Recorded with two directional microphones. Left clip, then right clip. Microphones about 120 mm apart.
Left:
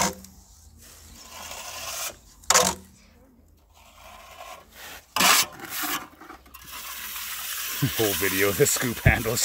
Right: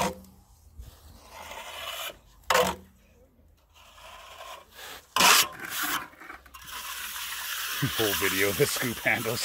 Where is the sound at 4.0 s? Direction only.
10° right (ahead or behind).